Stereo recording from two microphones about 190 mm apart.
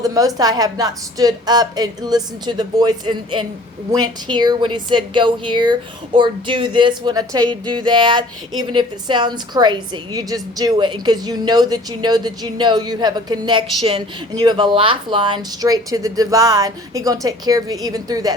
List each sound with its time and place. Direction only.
0.0 s a woman's voice: 20° right (ahead or behind)